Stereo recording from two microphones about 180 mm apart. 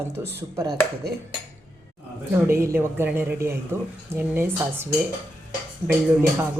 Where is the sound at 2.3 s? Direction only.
15° right (ahead or behind).